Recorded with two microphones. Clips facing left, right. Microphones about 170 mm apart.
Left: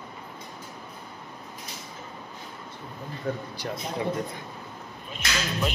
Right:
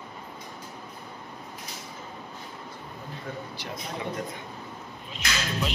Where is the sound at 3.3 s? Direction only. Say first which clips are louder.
Left 7 dB; 35° left (ahead or behind).